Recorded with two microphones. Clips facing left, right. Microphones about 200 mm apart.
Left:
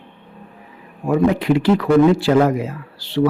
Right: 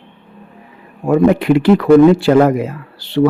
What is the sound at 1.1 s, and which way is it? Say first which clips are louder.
Speech: right 5 dB; 60° right (ahead or behind).